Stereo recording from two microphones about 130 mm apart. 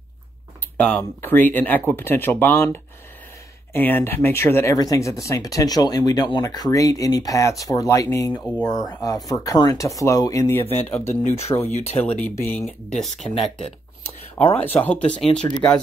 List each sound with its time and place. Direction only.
0.7 s speech: 10° left (ahead or behind)
11.2 s speech: 55° left (ahead or behind)
12.4 s speech: 10° left (ahead or behind)
14.0 s a sound: 50° left (ahead or behind)
14.6 s speech: 15° left (ahead or behind)
15.5 s speech: 25° left (ahead or behind)